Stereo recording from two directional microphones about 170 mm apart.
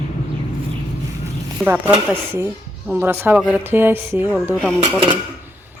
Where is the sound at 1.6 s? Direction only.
10° right (ahead or behind).